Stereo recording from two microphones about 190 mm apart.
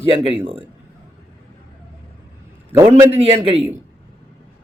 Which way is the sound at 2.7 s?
15° right (ahead or behind).